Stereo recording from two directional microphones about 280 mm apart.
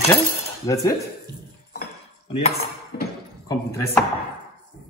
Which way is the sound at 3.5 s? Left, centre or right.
Centre.